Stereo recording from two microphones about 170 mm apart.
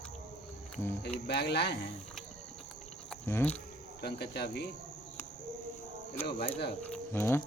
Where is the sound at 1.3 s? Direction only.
75° left (ahead or behind).